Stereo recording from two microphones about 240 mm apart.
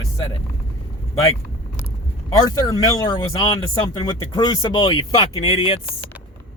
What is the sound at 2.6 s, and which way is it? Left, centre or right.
Speech, centre.